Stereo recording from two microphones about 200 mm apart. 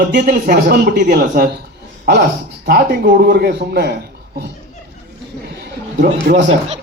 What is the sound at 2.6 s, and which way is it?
A man's voice, 50° right (ahead or behind).